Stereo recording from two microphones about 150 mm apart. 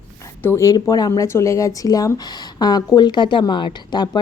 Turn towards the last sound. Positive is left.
turn(degrees=30)  # may be behind; listen again after turning